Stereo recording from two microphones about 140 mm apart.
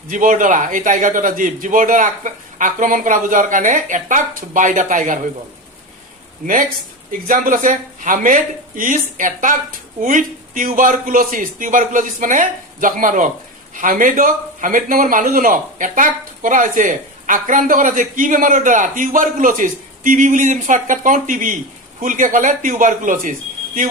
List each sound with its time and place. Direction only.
0.1 s a man's voice: 70° right (ahead or behind)
7.3 s a man's voice: 75° right (ahead or behind)